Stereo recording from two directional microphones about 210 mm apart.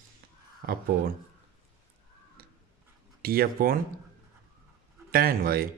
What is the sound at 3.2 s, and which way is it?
Speech, 45° right (ahead or behind).